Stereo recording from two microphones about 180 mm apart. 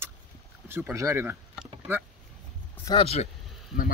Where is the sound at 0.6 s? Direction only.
10° right (ahead or behind).